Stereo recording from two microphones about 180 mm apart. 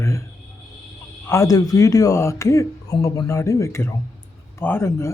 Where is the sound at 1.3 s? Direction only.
20° left (ahead or behind).